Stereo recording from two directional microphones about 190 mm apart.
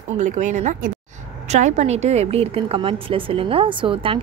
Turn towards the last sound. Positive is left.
turn(degrees=-30)  # may be behind; listen again after turning